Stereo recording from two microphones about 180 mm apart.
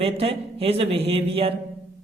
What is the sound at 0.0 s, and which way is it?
Speech, 35° right (ahead or behind).